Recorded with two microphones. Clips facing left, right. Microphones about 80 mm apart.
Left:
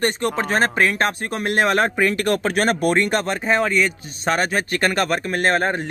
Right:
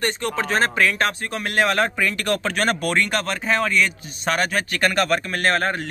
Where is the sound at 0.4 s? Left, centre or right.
Left.